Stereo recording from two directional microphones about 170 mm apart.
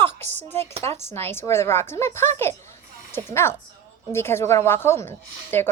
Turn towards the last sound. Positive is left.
turn(degrees=15)  # may be behind; listen again after turning